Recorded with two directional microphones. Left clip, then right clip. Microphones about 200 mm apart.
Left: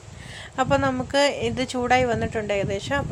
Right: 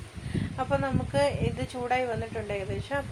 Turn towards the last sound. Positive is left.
turn(degrees=45)  # may be behind; listen again after turning